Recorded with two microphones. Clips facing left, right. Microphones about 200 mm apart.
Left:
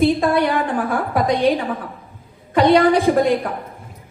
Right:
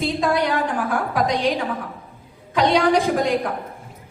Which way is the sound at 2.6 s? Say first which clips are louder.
Left 5 dB; 55° left (ahead or behind).